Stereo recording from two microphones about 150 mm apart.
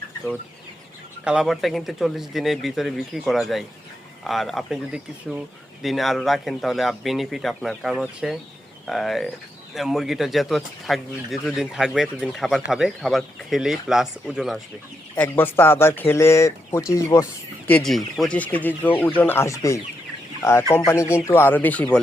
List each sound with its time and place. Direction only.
1.2 s speech: 5° right (ahead or behind)
15.1 s speech: 10° left (ahead or behind)
17.7 s speech: 5° left (ahead or behind)